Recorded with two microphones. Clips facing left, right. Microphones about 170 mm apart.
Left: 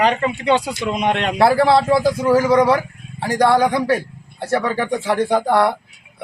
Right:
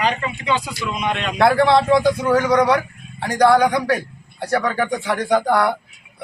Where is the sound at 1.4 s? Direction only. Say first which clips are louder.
Left 1 dB; 30° left (ahead or behind).